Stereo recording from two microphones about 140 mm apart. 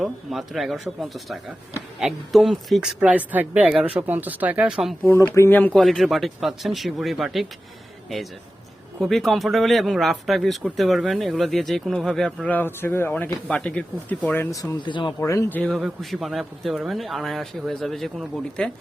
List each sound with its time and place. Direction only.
0.0 s speech: centre (ahead or behind)
5.0 s speech: 15° left (ahead or behind)
5.8 s speech: centre (ahead or behind)
9.0 s speech: centre (ahead or behind)
14.5 s speech: 25° left (ahead or behind)
15.2 s speech: 20° left (ahead or behind)
15.5 s speech: 5° left (ahead or behind)